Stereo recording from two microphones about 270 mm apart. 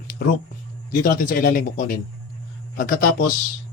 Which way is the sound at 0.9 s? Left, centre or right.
Left.